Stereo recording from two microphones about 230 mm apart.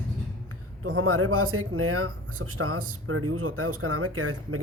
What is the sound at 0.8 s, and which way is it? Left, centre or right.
Speech, right.